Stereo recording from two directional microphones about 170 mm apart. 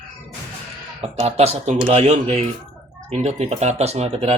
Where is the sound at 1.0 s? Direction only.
40° right (ahead or behind).